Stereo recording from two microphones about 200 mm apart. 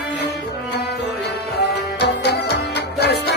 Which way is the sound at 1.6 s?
55° left (ahead or behind).